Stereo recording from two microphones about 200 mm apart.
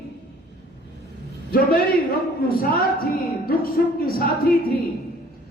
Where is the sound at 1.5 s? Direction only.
50° left (ahead or behind).